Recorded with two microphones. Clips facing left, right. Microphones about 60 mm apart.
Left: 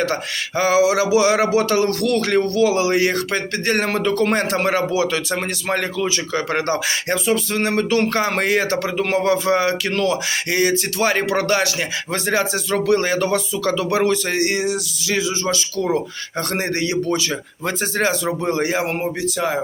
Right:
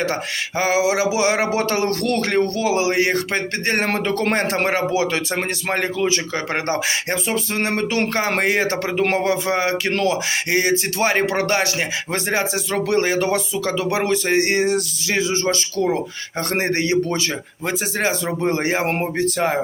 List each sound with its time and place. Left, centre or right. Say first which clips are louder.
0.0 s speech: left 1 dB; right
17.7 s speech: left 1 dB; centre
18.1 s speech: even; right
18.9 s speech: right 2 dB; right